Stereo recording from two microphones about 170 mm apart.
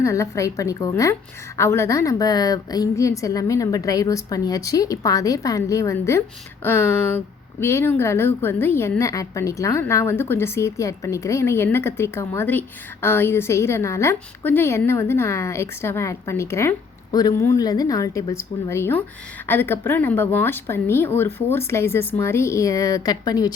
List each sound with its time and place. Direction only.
0.0 s a woman's voice: 15° left (ahead or behind)